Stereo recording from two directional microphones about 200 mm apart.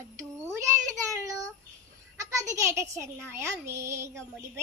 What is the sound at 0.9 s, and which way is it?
Child singing, 15° right (ahead or behind).